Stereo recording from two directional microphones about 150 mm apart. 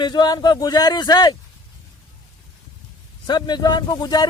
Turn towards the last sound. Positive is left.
turn(degrees=25)  # may be behind; listen again after turning